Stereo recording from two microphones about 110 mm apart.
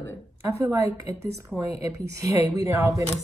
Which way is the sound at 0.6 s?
30° right (ahead or behind).